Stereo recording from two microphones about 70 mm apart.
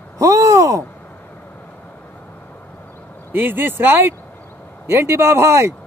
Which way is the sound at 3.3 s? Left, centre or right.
Right.